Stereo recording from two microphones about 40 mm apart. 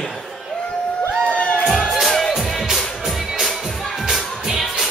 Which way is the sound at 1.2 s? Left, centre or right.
Left.